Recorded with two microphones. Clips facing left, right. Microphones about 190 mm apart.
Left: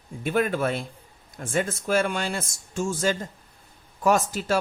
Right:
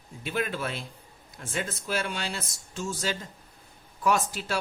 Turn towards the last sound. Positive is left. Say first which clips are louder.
# left 5 dB
turn(degrees=45)  # may be behind; listen again after turning